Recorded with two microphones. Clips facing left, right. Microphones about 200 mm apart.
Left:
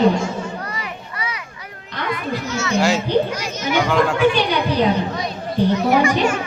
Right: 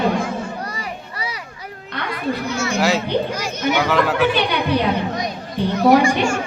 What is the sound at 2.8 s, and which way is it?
Children playing, centre (ahead or behind).